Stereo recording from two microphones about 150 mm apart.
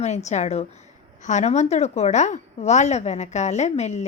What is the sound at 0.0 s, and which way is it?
A woman's voice, 50° left (ahead or behind).